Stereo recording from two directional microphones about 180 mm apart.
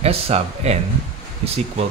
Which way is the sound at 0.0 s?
35° right (ahead or behind).